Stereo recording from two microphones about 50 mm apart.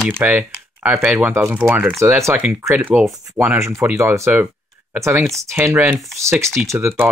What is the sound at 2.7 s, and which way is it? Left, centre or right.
Speech, right.